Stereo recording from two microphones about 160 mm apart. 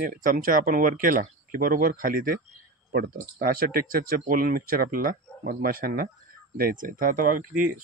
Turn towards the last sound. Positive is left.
turn(degrees=-60)  # may be behind; listen again after turning